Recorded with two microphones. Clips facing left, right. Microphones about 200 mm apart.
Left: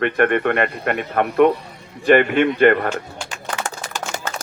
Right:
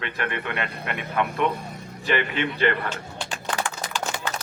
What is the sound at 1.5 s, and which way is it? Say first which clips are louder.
Music: left 4 dB; 45° right (ahead or behind).